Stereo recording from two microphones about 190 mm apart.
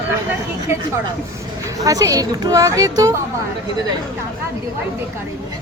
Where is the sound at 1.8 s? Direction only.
15° right (ahead or behind).